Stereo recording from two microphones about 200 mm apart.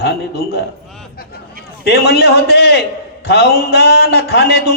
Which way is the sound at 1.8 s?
55° left (ahead or behind).